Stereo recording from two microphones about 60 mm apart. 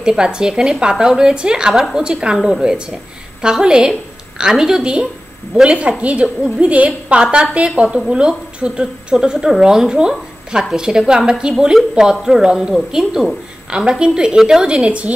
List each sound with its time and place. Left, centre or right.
0.0 s a woman's voice: centre